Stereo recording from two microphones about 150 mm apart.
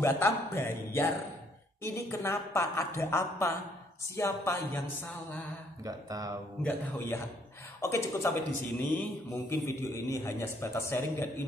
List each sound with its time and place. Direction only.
0.0 s a man's voice: 15° left (ahead or behind)
5.9 s speech: 25° right (ahead or behind)
6.6 s a man's voice: 15° left (ahead or behind)